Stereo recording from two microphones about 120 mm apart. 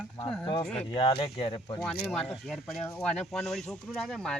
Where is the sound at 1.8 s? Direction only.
5° left (ahead or behind).